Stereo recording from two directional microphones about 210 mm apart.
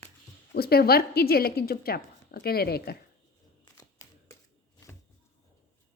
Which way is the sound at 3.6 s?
15° left (ahead or behind).